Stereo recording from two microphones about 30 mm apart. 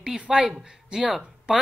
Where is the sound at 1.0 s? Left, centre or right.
Centre.